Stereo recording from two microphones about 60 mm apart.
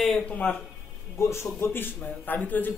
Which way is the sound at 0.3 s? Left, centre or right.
Left.